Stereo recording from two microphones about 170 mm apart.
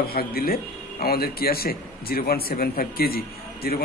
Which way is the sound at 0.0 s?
60° left (ahead or behind).